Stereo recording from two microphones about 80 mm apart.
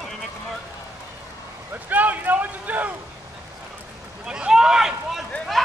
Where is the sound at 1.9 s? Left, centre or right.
Right.